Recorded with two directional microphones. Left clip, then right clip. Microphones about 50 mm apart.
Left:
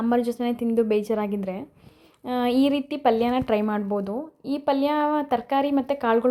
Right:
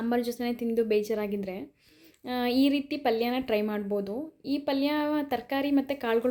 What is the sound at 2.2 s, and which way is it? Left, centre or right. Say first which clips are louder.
Speech: left 5 dB; centre.